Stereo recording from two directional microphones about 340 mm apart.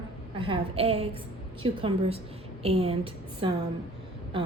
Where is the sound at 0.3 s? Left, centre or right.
Centre.